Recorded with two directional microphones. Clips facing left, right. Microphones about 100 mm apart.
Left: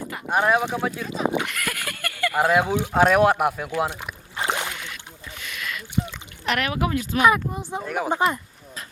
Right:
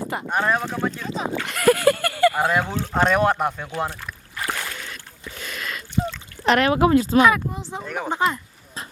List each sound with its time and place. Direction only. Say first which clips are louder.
0.3 s speech: left 3 dB; 10° left (ahead or behind)
1.5 s speech: right 14 dB; 30° right (ahead or behind)
2.4 s speech: left 2 dB; 10° left (ahead or behind)
3.8 s rowboat: left 2 dB; 15° left (ahead or behind)
5.4 s a sound: right 1 dB; 35° right (ahead or behind)
6.4 s speech: right 7 dB; 35° right (ahead or behind)
7.3 s speech: even; 15° left (ahead or behind)